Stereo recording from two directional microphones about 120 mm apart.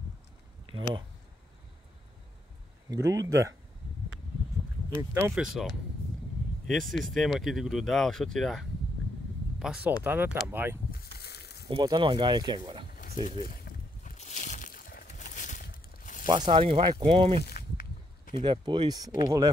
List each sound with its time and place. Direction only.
0.7 s speech: 45° right (ahead or behind)
2.9 s speech: 25° right (ahead or behind)
4.9 s speech: 20° right (ahead or behind)
5.3 s speech: 5° right (ahead or behind)
10.0 s speech: 15° right (ahead or behind)
11.6 s speech: 35° right (ahead or behind)
13.0 s a sound: 90° left
14.0 s a sound: 80° left
16.3 s speech: 45° right (ahead or behind); by 19.5 s 25° right (ahead or behind)